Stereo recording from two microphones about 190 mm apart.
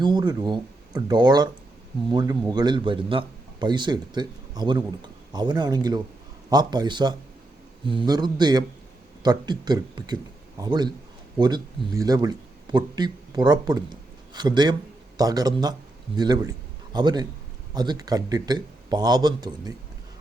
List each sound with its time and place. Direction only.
0.0 s a man's voice: 20° right (ahead or behind)